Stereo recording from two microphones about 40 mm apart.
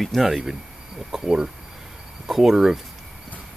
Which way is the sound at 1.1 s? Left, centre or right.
Centre.